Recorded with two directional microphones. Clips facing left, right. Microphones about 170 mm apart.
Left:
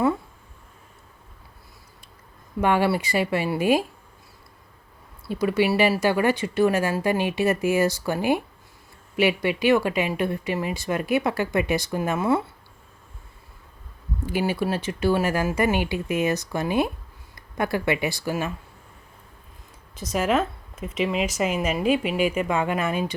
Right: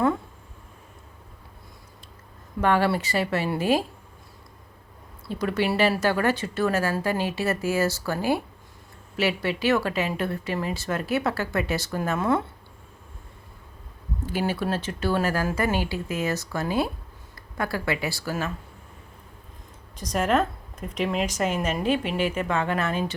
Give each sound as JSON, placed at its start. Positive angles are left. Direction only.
{"t": 2.6, "sound": "a woman's voice", "side_deg": 15}
{"t": 5.3, "sound": "a woman's voice", "side_deg": 10}
{"t": 14.3, "sound": "a woman's voice", "side_deg": 10}
{"t": 20.0, "sound": "a woman's voice", "side_deg": 5}